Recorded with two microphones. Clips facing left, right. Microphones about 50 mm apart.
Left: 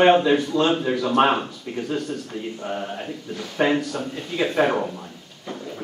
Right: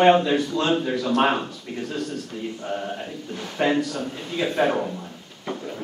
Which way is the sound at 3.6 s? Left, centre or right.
Left.